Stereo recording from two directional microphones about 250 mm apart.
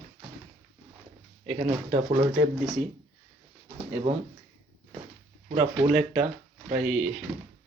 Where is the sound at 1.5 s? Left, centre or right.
Right.